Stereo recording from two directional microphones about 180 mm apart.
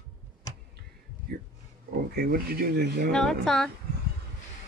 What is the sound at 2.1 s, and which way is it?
Speech, 60° right (ahead or behind).